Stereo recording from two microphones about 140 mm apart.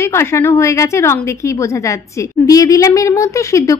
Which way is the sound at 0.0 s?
20° left (ahead or behind).